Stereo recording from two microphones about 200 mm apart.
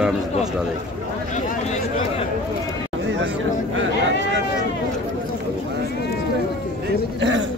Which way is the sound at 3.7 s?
70° right (ahead or behind).